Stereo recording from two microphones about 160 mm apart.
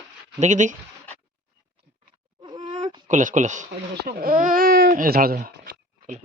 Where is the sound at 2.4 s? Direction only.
30° right (ahead or behind).